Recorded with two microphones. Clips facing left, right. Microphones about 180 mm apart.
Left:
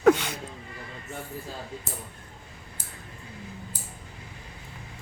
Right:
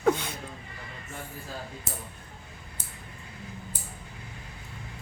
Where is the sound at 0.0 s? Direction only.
80° left.